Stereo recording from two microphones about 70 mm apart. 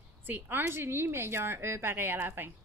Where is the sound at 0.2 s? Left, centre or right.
Right.